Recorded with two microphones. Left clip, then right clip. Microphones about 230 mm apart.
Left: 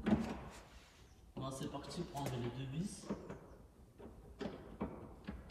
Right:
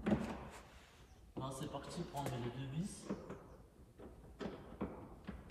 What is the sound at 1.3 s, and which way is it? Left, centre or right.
Speech, centre.